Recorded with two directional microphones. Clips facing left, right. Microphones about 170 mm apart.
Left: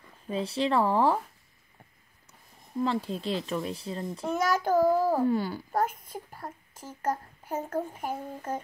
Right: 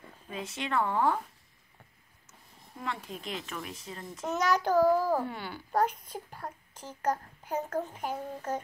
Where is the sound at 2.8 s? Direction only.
30° left (ahead or behind); by 6.2 s 50° left (ahead or behind).